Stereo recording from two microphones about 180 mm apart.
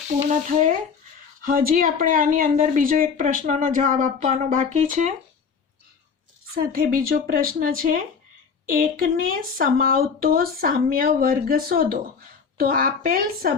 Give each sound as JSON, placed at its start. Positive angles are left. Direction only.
{"t": 1.4, "sound": "speech", "side_deg": -50}
{"t": 6.5, "sound": "speech", "side_deg": -55}